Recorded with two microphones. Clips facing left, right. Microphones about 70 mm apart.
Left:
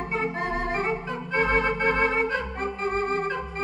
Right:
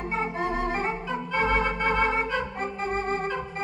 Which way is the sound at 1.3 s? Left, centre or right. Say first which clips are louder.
Left 2 dB; left.